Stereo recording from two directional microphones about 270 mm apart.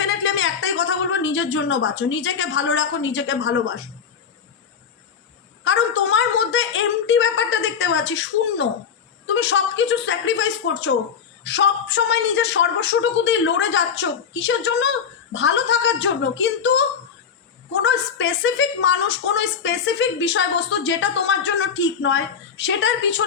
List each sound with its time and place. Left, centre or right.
0.0 s a woman's voice: left
5.6 s a woman's voice: left